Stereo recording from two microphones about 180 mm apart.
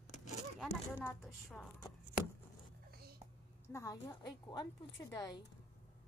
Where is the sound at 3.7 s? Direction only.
15° left (ahead or behind).